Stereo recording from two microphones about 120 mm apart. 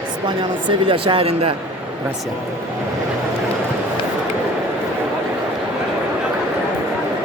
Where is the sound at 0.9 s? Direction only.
45° right (ahead or behind).